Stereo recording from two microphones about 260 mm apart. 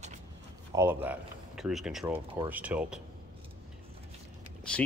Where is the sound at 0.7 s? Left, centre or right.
Centre.